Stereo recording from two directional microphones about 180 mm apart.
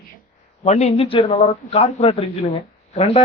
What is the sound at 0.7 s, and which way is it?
Speech, 35° left (ahead or behind).